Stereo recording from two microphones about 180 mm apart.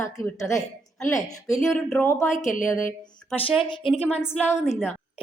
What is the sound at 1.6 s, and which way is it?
Music, centre (ahead or behind).